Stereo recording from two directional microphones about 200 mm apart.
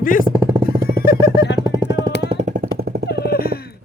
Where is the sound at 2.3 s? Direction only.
35° right (ahead or behind).